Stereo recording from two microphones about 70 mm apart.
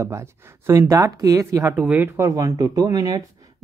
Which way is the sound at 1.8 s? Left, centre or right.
Centre.